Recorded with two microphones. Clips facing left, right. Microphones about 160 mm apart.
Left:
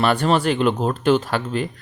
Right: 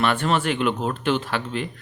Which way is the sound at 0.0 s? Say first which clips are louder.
Left 4 dB; 35° left (ahead or behind).